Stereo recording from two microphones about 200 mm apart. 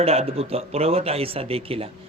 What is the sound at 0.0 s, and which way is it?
A man's voice, 30° right (ahead or behind).